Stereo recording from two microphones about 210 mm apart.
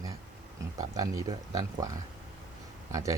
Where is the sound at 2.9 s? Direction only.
15° right (ahead or behind).